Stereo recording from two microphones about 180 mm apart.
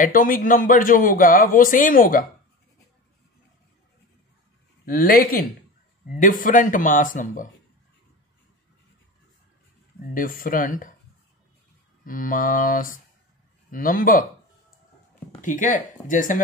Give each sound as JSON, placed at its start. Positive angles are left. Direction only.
{"t": 0.0, "sound": "speech", "side_deg": 50}
{"t": 4.8, "sound": "speech", "side_deg": 55}
{"t": 10.1, "sound": "speech", "side_deg": 50}
{"t": 12.0, "sound": "speech", "side_deg": 50}
{"t": 15.4, "sound": "speech", "side_deg": 45}